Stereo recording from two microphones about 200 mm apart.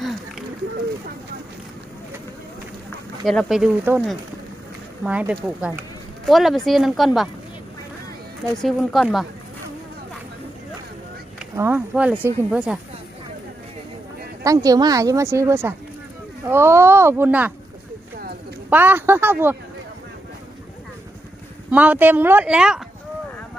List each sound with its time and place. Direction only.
0.0 s a sound: centre (ahead or behind)
3.2 s speech: centre (ahead or behind)
8.6 s speech: centre (ahead or behind)
11.5 s speech: 10° right (ahead or behind)
14.4 s speech: 15° right (ahead or behind)
18.7 s speech: 10° right (ahead or behind)
21.7 s speech: 10° right (ahead or behind)